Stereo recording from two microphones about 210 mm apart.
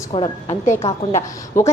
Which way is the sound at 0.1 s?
25° left (ahead or behind).